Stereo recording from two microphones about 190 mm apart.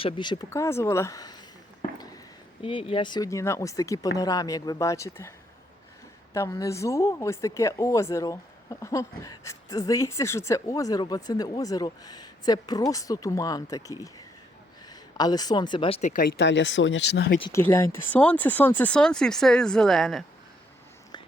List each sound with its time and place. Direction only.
0.0 s speech: 25° left (ahead or behind)
6.3 s speech: 15° left (ahead or behind)
15.2 s speech: 20° left (ahead or behind)
16.0 s speech: 40° left (ahead or behind)
16.4 s speech: 75° left (ahead or behind)
17.7 s speech: 15° left (ahead or behind)